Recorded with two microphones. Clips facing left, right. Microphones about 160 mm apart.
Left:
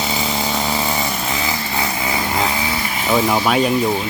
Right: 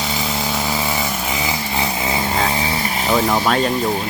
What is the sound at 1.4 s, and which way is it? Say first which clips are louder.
Chainsaw: even; 20° right (ahead or behind).